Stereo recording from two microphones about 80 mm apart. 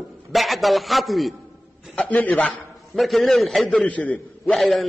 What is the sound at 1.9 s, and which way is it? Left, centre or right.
Speech, centre.